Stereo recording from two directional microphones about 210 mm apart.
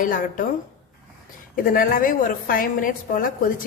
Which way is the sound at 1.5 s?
40° left (ahead or behind).